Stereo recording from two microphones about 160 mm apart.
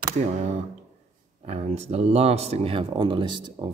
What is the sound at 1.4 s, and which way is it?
Speech, 40° right (ahead or behind).